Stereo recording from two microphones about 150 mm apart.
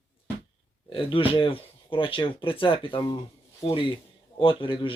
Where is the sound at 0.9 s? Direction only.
35° left (ahead or behind).